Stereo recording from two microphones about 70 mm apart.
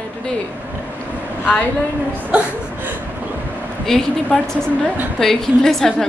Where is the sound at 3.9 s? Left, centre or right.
Centre.